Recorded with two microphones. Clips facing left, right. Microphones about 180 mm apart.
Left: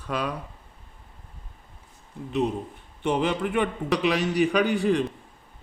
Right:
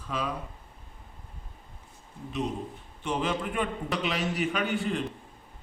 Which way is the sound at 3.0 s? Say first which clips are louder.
Left 5 dB; 65° left (ahead or behind).